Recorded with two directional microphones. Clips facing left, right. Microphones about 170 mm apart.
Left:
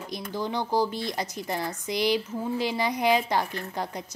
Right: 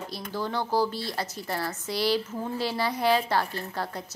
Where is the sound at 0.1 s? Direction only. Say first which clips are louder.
Left 2 dB; 15° left (ahead or behind).